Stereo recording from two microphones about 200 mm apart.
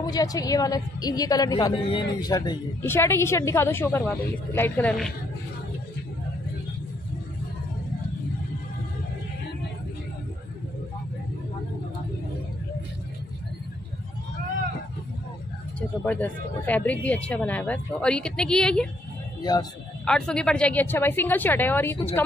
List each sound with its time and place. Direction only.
0.0 s a woman's voice: 20° left (ahead or behind)
16.1 s a woman's voice: 10° left (ahead or behind)
20.1 s a woman's voice: 5° left (ahead or behind)